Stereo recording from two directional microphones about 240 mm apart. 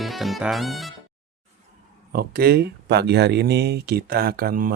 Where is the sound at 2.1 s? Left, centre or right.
Right.